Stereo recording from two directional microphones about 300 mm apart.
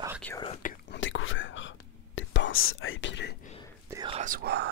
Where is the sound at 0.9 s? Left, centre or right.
Left.